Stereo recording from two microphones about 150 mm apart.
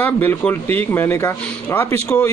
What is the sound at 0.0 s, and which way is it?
A man's voice, 15° left (ahead or behind).